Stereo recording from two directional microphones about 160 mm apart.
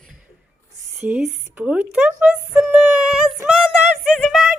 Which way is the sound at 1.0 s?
5° right (ahead or behind).